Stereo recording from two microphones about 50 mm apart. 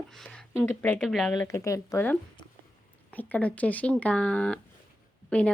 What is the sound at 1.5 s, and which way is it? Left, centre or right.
Speech, left.